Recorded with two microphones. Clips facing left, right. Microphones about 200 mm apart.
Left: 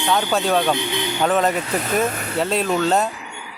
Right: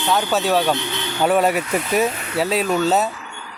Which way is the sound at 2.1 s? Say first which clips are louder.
Even; 45° left (ahead or behind).